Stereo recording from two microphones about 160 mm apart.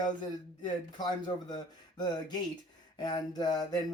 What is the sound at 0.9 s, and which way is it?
Speech, 25° left (ahead or behind).